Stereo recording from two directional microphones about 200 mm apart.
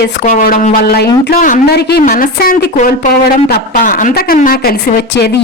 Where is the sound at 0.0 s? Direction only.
45° left (ahead or behind).